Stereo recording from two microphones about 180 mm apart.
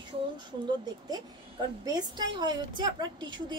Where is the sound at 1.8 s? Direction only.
20° right (ahead or behind).